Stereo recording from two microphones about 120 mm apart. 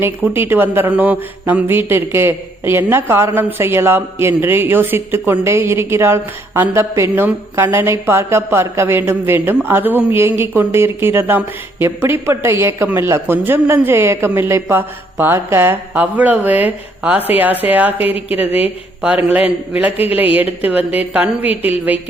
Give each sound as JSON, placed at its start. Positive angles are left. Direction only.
{"t": 0.0, "sound": "a woman's voice", "side_deg": -20}